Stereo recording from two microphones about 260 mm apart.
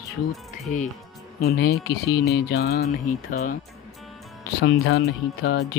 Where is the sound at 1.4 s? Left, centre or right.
Left.